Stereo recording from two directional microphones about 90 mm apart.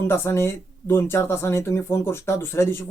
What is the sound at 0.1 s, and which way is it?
Speech, 30° left (ahead or behind).